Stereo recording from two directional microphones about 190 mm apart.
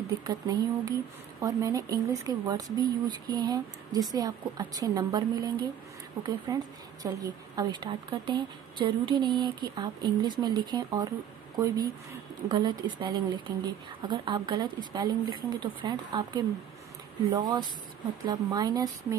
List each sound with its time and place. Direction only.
0.2 s a woman's voice: 20° right (ahead or behind)